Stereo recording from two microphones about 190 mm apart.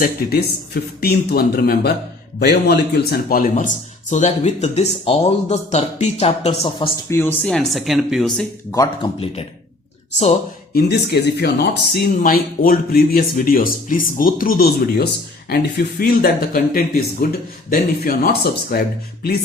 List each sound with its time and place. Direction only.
0.0 s a man's voice: 55° left (ahead or behind); by 6.9 s 30° left (ahead or behind)
7.1 s speech: 10° left (ahead or behind)
9.2 s speech: 30° left (ahead or behind)
10.8 s speech: 60° left (ahead or behind)